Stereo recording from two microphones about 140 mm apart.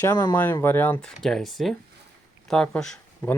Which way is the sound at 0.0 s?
25° left (ahead or behind).